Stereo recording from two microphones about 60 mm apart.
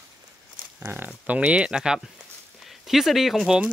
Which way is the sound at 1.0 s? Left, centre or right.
Centre.